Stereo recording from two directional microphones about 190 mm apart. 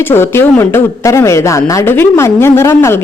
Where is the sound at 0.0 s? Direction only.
10° left (ahead or behind).